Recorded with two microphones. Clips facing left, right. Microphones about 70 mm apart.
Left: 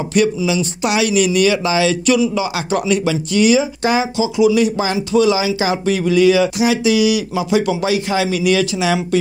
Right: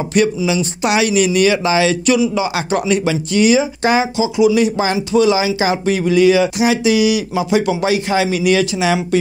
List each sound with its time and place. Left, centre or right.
0.2 s speech: right
4.2 s speech: right